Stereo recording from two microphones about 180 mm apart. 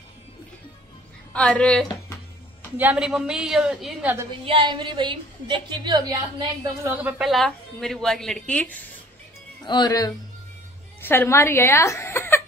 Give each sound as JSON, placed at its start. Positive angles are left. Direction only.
{"t": 1.3, "sound": "a woman's voice", "side_deg": 5}
{"t": 2.8, "sound": "a woman's voice", "side_deg": -5}
{"t": 4.5, "sound": "a woman's voice", "side_deg": -25}
{"t": 9.7, "sound": "speech", "side_deg": 20}